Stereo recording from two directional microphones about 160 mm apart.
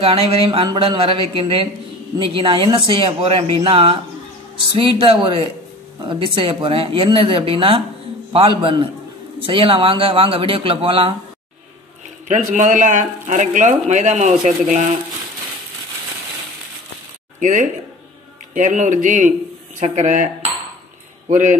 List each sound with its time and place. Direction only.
0.0 s speech: 35° right (ahead or behind)
12.3 s speech: 50° right (ahead or behind)
17.4 s speech: 50° right (ahead or behind)
21.3 s speech: 50° right (ahead or behind)